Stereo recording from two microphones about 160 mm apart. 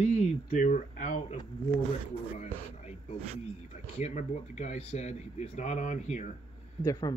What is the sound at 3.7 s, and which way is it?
A man's voice, 45° left (ahead or behind).